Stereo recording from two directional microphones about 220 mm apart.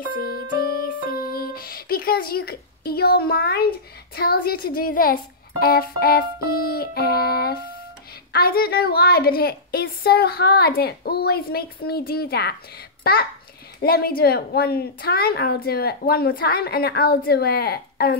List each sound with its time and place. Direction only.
0.1 s music: 45° left (ahead or behind)
4.1 s a woman's voice: 45° left (ahead or behind)